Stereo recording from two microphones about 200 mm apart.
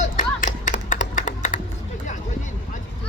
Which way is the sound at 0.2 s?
40° left (ahead or behind).